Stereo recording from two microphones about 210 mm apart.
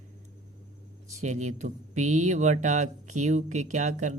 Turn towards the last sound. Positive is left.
turn(degrees=-35)  # may be behind; listen again after turning